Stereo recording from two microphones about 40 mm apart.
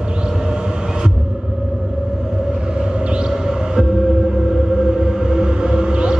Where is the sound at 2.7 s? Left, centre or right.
Right.